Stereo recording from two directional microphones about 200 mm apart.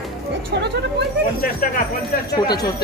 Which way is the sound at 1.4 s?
45° left (ahead or behind).